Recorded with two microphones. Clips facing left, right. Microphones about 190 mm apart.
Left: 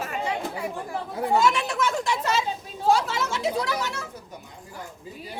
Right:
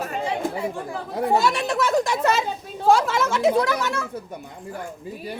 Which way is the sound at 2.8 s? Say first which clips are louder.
Right 4 dB; 50° right (ahead or behind).